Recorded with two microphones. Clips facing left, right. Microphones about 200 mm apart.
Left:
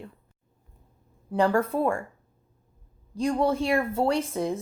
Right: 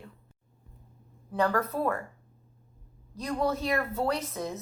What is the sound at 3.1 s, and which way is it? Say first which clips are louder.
Speech: left 5 dB; 30° left (ahead or behind).